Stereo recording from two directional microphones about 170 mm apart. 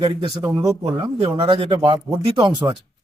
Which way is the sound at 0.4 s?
20° right (ahead or behind).